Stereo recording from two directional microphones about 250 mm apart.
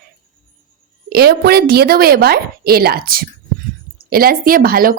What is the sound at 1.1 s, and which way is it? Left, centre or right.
A woman's voice, right.